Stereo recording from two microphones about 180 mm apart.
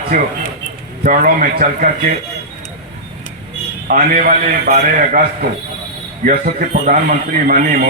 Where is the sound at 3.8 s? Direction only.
50° right (ahead or behind).